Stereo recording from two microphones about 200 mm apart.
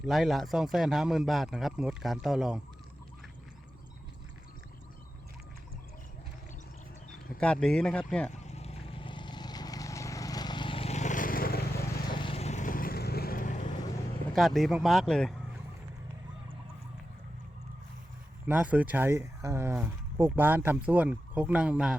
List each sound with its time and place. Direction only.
0.0 s a man's voice: centre (ahead or behind)
7.3 s a man's voice: 5° left (ahead or behind)
8.3 s vehicle: 35° left (ahead or behind)
12.2 s vehicle: 30° left (ahead or behind)
14.3 s a man's voice: centre (ahead or behind)
18.4 s speech: 5° right (ahead or behind)